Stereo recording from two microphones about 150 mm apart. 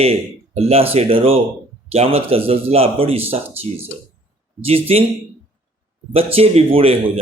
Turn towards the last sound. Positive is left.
turn(degrees=-40)  # may be behind; listen again after turning